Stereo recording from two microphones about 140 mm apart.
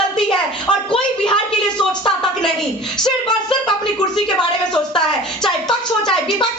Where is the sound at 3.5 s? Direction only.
5° left (ahead or behind).